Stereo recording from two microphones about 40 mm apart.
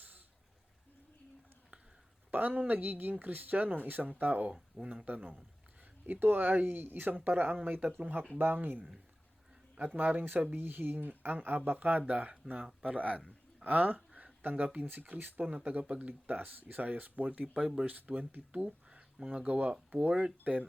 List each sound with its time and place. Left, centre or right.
2.3 s speech: right
6.1 s speech: right
9.7 s speech: right
12.5 s speech: right
13.7 s speech: right
14.5 s speech: right
14.8 s speech: right
15.4 s speech: right
17.8 s speech: right
18.5 s a sound: right
19.3 s speech: right